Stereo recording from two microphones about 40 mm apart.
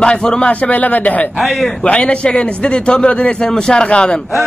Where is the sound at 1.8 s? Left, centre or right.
Left.